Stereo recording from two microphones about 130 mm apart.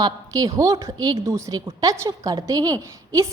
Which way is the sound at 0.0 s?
30° right (ahead or behind).